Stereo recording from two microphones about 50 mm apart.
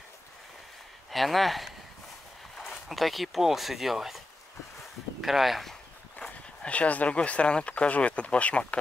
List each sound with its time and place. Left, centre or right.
1.1 s speech: centre
5.2 s speech: centre
5.7 s speech: centre